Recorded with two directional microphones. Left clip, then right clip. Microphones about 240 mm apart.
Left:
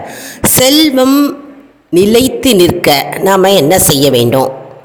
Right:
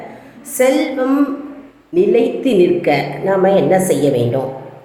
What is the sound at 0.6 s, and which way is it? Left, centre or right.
A woman's voice, left.